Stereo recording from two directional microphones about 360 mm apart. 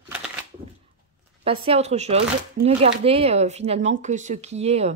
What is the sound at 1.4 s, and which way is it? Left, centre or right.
Speech, centre.